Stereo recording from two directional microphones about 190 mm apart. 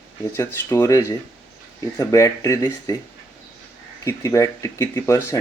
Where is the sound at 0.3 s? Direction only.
15° left (ahead or behind).